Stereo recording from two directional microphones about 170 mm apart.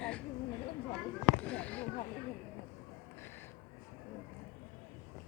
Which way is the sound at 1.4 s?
10° left (ahead or behind).